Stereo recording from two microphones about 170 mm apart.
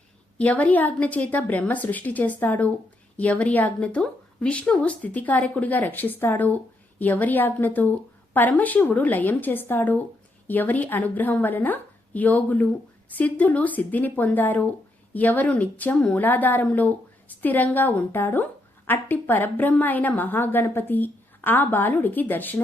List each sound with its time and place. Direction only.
0.3 s a woman's voice: 10° left (ahead or behind)